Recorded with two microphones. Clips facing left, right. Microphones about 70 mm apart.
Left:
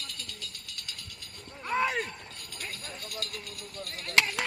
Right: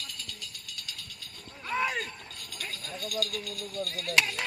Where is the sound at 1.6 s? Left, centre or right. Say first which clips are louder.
Left 2 dB; left.